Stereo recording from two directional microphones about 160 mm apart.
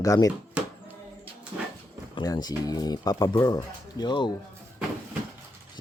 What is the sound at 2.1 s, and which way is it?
Speech, 25° left (ahead or behind).